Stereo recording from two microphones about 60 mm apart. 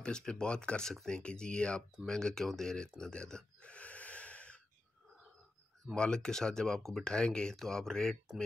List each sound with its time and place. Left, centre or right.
0.0 s speech: centre
3.7 s snort: left
5.9 s speech: centre